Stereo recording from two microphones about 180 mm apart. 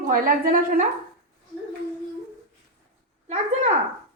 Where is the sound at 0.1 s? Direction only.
50° right (ahead or behind).